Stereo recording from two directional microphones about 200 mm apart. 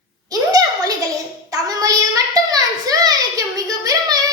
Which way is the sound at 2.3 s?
20° right (ahead or behind).